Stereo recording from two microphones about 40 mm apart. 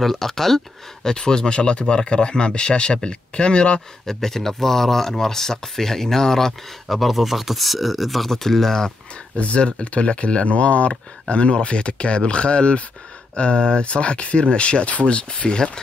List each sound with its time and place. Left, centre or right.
0.0 s speech: centre
1.0 s speech: centre
4.0 s speech: centre
9.4 s speech: left